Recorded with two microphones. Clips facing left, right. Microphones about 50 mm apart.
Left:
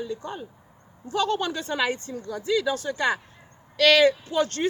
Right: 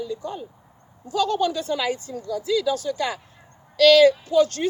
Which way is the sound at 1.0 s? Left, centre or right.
Left.